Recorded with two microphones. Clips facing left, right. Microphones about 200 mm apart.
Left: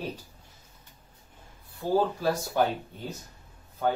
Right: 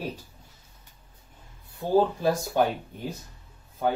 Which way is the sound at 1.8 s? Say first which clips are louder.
Right 3 dB; 20° right (ahead or behind).